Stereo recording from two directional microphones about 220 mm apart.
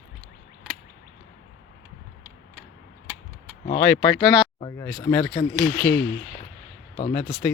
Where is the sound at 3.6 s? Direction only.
25° left (ahead or behind); by 5.5 s 10° left (ahead or behind).